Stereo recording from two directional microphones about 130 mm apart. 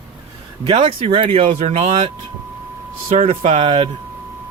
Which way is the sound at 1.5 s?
60° right (ahead or behind).